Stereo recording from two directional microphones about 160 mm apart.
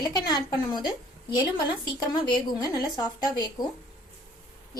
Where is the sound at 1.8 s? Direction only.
30° left (ahead or behind).